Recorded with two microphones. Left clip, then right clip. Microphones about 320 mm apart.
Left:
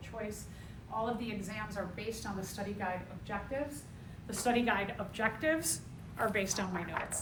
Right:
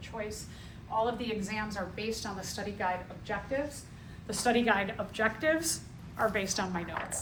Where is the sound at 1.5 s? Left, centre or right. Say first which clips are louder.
Right 4 dB; right.